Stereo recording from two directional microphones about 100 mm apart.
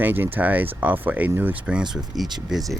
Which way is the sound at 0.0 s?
20° right (ahead or behind).